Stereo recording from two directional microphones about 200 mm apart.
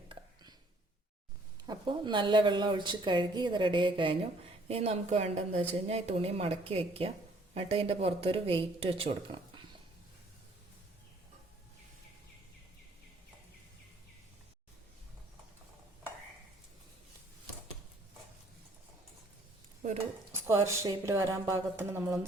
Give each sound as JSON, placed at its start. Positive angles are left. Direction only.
{"t": 1.6, "sound": "a woman's voice", "side_deg": -20}
{"t": 20.5, "sound": "speech", "side_deg": -15}